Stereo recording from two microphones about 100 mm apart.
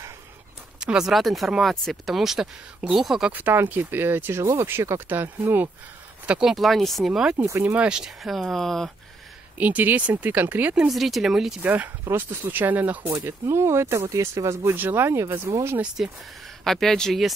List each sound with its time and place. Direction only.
0.7 s speech: 5° right (ahead or behind)
3.3 s speech: 20° right (ahead or behind)
6.5 s speech: centre (ahead or behind)
9.6 s speech: 15° right (ahead or behind)
10.9 s speech: centre (ahead or behind)
11.6 s speech: 15° right (ahead or behind)
16.0 s speech: 5° right (ahead or behind)